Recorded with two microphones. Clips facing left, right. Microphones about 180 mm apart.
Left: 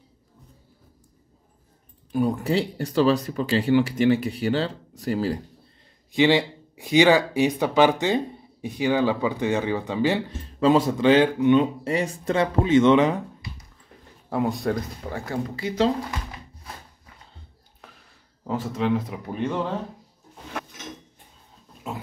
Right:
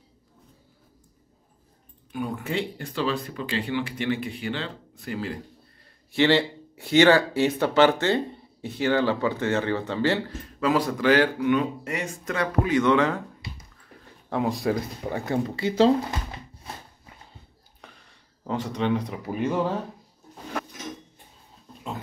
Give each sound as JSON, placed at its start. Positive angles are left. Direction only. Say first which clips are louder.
{"t": 2.1, "sound": "speech", "louder": "left 6 dB", "side_deg": 35}
{"t": 6.1, "sound": "speech", "louder": "left 1 dB", "side_deg": 15}
{"t": 14.3, "sound": "speech", "louder": "left 1 dB", "side_deg": 0}
{"t": 15.0, "sound": "speech", "louder": "right 4 dB", "side_deg": -20}
{"t": 17.8, "sound": "a sound", "louder": "even", "side_deg": 0}
{"t": 18.5, "sound": "speech", "louder": "left 1 dB", "side_deg": 5}